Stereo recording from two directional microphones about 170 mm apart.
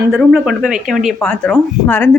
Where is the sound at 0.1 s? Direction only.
5° right (ahead or behind).